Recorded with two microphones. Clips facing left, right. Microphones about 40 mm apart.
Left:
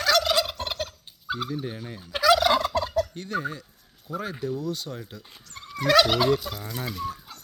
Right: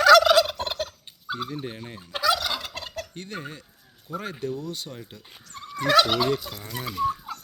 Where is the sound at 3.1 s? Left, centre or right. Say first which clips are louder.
Left 6 dB; right.